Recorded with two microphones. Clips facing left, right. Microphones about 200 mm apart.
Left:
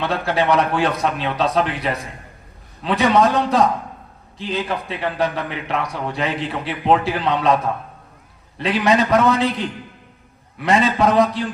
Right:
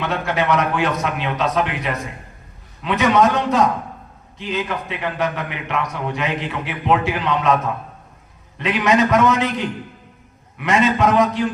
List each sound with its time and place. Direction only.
0.0 s a man's voice: 30° left (ahead or behind)